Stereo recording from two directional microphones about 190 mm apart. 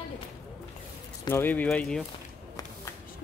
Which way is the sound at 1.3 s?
10° left (ahead or behind).